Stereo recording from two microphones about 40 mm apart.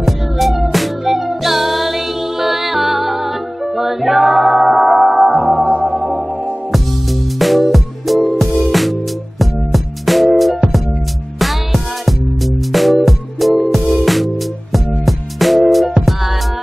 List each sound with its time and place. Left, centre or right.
0.0 s music: centre
5.6 s music: right
7.3 s music: centre